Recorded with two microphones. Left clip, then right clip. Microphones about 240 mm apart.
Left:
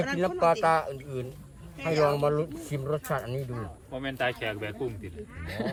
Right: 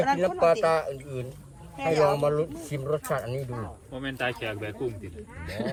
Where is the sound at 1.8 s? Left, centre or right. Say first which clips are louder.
Right 2 dB; centre.